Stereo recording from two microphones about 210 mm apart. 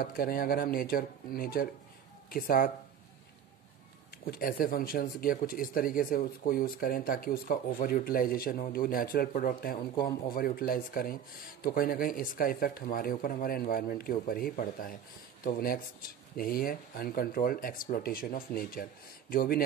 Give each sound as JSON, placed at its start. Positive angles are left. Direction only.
{"t": 0.0, "sound": "speech", "side_deg": 45}
{"t": 4.3, "sound": "speech", "side_deg": 45}